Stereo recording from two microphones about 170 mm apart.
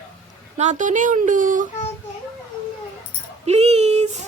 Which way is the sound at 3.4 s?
40° right (ahead or behind).